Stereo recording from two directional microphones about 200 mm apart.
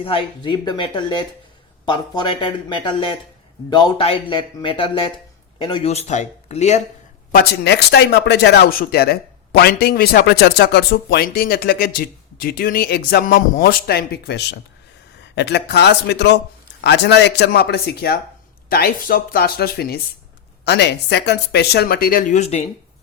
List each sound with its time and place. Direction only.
0.0 s speech: 25° left (ahead or behind)
7.3 s speech: 55° left (ahead or behind); by 22.7 s 30° left (ahead or behind)